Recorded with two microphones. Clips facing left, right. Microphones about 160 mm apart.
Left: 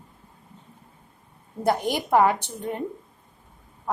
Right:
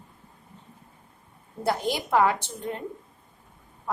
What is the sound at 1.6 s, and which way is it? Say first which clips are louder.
A woman's voice: left 3 dB; 15° left (ahead or behind).